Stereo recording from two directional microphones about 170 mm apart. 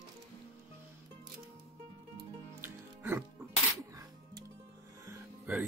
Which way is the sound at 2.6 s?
15° right (ahead or behind).